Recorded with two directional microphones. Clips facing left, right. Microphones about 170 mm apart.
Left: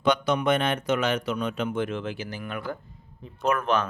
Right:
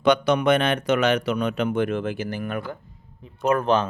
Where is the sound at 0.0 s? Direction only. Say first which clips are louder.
Right 4 dB; 70° right (ahead or behind); by 2.6 s 50° right (ahead or behind).